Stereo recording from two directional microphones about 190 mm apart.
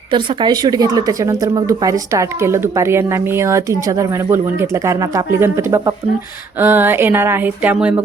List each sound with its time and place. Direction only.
0.1 s a woman's voice: 25° right (ahead or behind); by 8.0 s 5° right (ahead or behind)